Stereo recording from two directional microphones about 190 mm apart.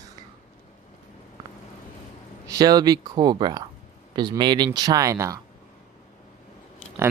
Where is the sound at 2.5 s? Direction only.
20° right (ahead or behind).